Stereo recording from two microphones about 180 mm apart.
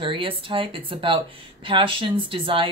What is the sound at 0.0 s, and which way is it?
Speech, 30° right (ahead or behind).